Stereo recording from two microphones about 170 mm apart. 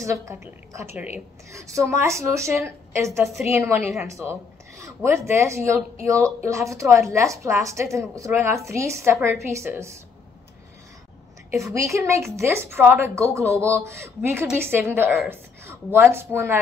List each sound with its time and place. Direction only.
0.0 s a woman's voice: 20° right (ahead or behind)
11.5 s a woman's voice: 15° right (ahead or behind)